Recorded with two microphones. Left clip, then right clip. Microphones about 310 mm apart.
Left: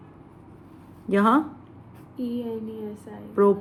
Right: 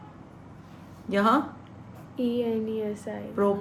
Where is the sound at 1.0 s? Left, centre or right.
Left.